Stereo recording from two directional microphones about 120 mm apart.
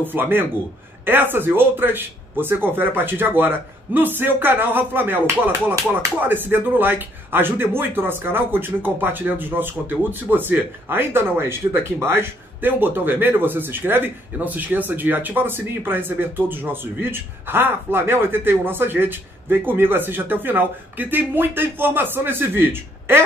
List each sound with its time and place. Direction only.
0.0 s speech: 15° right (ahead or behind)